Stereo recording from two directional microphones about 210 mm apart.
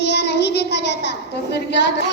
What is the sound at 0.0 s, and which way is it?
Child singing, 55° left (ahead or behind).